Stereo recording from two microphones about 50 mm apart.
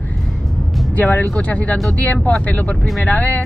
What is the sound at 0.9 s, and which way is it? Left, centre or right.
Speech, left.